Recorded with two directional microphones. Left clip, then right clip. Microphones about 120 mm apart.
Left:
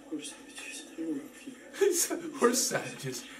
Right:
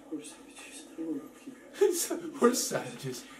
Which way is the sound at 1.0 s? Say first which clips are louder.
Left 1 dB; 30° left (ahead or behind).